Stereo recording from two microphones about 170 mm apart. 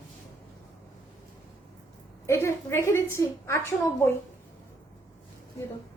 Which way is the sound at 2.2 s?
15° left (ahead or behind).